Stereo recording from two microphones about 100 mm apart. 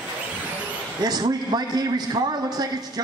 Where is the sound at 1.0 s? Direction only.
40° right (ahead or behind).